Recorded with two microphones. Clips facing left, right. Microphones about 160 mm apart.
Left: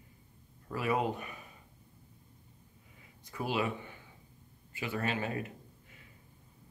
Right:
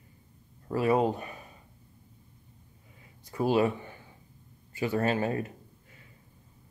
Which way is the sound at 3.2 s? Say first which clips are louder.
Right 8 dB; 35° right (ahead or behind).